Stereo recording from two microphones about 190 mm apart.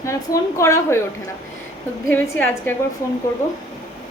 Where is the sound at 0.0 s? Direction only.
15° left (ahead or behind).